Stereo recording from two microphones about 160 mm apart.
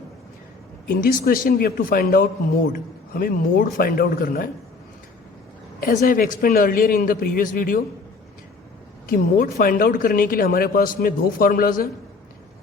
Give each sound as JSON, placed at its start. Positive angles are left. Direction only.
{"t": 0.9, "sound": "speech", "side_deg": 60}
{"t": 5.8, "sound": "speech", "side_deg": 55}
{"t": 9.0, "sound": "speech", "side_deg": 60}